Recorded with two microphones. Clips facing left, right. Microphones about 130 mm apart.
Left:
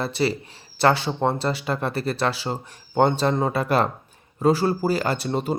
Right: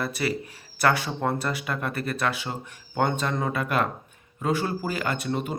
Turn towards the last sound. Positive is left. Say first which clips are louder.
# left 4 dB
turn(degrees=30)  # may be behind; listen again after turning